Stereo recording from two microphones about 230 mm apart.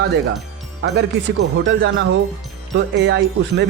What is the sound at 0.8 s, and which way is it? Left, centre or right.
Speech, right.